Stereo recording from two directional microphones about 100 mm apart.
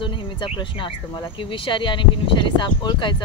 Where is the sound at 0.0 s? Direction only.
55° left (ahead or behind).